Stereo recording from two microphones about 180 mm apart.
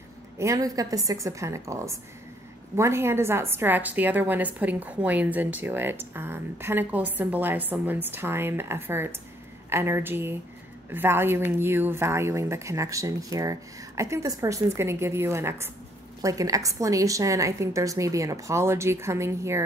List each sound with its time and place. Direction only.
0.4 s a woman's voice: 20° right (ahead or behind)